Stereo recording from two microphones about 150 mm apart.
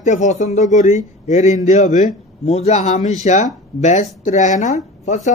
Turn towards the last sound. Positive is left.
turn(degrees=50)  # may be behind; listen again after turning